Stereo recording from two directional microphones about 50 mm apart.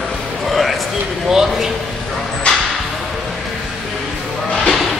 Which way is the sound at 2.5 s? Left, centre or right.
Left.